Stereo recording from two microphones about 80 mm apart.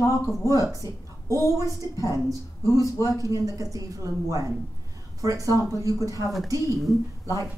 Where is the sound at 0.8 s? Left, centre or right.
Left.